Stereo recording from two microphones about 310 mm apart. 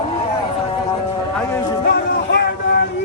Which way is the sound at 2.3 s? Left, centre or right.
Left.